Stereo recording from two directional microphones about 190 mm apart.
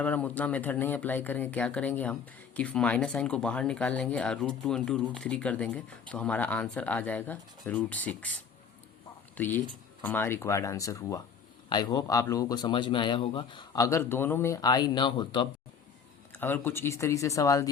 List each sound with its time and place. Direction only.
0.0 s speech: 10° left (ahead or behind); by 15.4 s 25° left (ahead or behind)
16.4 s speech: 10° left (ahead or behind)